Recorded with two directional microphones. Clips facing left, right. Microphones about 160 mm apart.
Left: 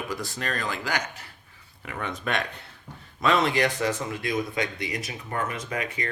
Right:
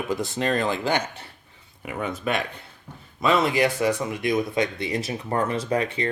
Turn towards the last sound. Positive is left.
turn(degrees=-30)  # may be behind; listen again after turning